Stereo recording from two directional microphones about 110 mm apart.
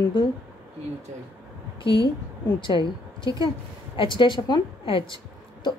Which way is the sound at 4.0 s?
45° left (ahead or behind).